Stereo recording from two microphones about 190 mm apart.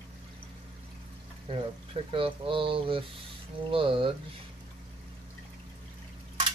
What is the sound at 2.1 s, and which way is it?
Speech, 30° right (ahead or behind).